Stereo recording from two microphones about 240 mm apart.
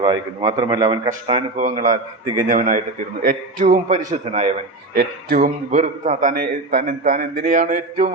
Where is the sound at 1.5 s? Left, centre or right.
Right.